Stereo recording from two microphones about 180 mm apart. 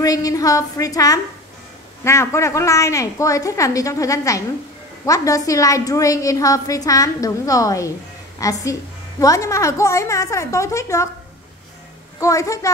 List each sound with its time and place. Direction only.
0.0 s a woman's voice: 20° left (ahead or behind)
12.2 s a woman's voice: 15° left (ahead or behind)